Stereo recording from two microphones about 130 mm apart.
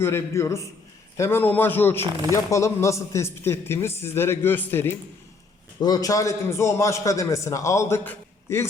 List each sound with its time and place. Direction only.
0.0 s a man's voice: 20° left (ahead or behind)
5.8 s a man's voice: 30° left (ahead or behind)